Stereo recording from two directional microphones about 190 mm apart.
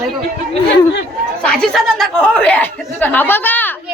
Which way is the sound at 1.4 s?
Centre (ahead or behind).